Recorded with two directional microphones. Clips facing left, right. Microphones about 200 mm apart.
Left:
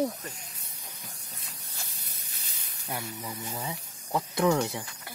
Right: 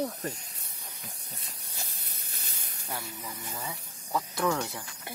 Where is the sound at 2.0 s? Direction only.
50° right (ahead or behind).